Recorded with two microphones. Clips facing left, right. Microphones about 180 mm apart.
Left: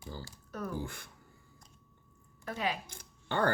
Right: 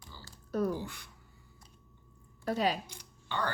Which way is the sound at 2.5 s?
35° right (ahead or behind).